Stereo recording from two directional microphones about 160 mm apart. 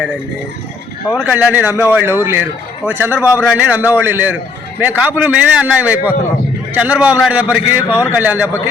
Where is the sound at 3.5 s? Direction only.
10° right (ahead or behind).